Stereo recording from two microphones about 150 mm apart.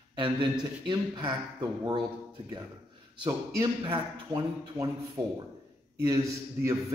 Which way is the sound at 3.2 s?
30° right (ahead or behind).